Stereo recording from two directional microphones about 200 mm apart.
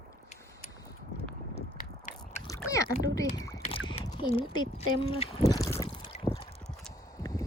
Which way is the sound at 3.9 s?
25° left (ahead or behind).